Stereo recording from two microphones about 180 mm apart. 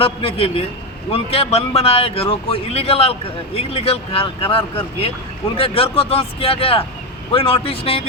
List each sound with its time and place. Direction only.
0.0 s a man's voice: 30° left (ahead or behind)